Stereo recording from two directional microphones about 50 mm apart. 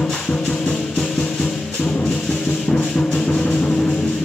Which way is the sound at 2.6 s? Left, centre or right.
Left.